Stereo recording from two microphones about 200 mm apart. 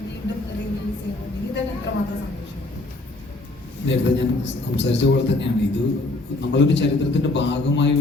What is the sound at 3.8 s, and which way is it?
A man's voice, 65° left (ahead or behind).